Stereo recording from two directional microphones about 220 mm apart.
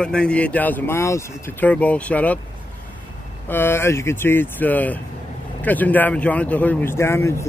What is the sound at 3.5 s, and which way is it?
Speech, 10° left (ahead or behind).